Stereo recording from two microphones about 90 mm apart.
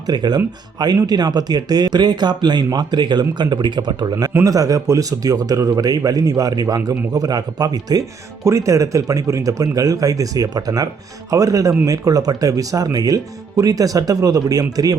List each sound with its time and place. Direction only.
0.1 s speech: 50° right (ahead or behind)
8.4 s speech: 35° right (ahead or behind)